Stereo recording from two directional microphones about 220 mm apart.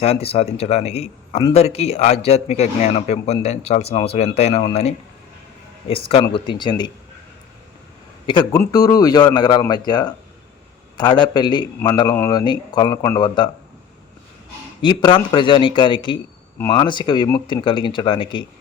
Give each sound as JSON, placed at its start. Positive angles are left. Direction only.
{"t": 0.0, "sound": "a man's voice", "side_deg": 30}
{"t": 8.3, "sound": "a man's voice", "side_deg": 20}
{"t": 14.8, "sound": "a man's voice", "side_deg": 20}